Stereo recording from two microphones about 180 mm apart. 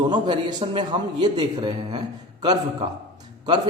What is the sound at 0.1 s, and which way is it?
A man's voice, 25° right (ahead or behind).